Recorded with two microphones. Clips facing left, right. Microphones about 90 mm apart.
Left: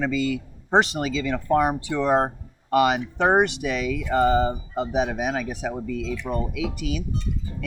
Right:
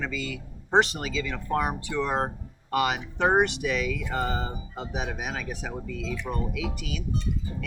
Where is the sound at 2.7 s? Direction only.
20° left (ahead or behind).